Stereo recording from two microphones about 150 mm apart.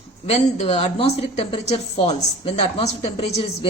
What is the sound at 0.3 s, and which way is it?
Speech, 45° left (ahead or behind).